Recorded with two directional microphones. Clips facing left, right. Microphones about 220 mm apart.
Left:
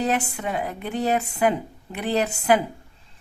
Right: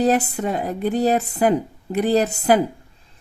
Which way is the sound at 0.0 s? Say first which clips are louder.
Right 6 dB; 35° right (ahead or behind).